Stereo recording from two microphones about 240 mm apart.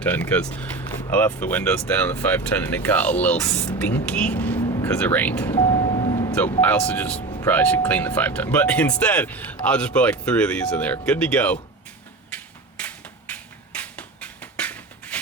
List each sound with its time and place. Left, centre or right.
0.0 s speech: centre
5.6 s vehicle: centre
6.6 s speech: centre
7.2 s vehicle: left
7.4 s speech: centre
12.8 s a sound: centre